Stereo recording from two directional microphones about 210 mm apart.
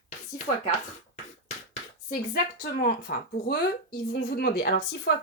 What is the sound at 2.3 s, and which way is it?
A woman's voice, 45° left (ahead or behind).